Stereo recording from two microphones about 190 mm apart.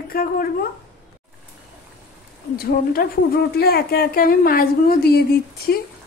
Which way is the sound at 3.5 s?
55° left (ahead or behind).